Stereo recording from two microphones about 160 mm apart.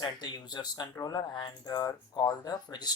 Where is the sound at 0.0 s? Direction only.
25° left (ahead or behind).